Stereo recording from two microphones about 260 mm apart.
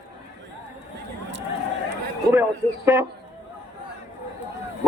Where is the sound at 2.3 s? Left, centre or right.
Centre.